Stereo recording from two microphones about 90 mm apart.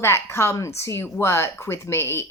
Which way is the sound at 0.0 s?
30° left (ahead or behind).